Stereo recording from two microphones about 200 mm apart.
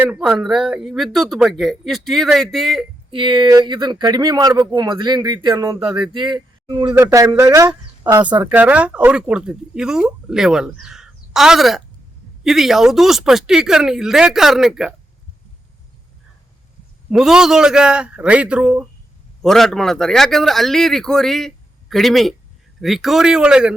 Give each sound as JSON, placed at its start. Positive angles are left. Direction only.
{"t": 0.0, "sound": "speech", "side_deg": -5}
{"t": 3.1, "sound": "a man's voice", "side_deg": -25}
{"t": 8.4, "sound": "speech", "side_deg": -10}
{"t": 17.1, "sound": "speech", "side_deg": 0}